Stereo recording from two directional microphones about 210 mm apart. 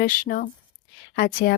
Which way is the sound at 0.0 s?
40° left (ahead or behind).